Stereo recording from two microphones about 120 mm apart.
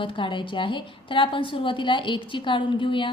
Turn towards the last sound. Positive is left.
turn(degrees=45)  # may be behind; listen again after turning